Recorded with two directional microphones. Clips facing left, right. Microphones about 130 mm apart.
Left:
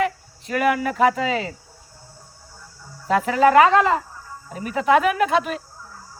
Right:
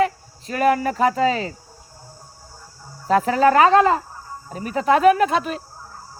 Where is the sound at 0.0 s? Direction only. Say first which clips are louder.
Right 3 dB; 35° right (ahead or behind).